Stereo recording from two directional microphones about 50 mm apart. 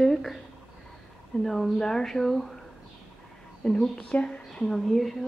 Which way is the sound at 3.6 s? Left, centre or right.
Centre.